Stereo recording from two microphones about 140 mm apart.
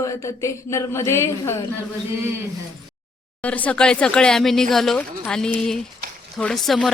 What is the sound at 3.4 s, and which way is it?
Speech, 10° left (ahead or behind).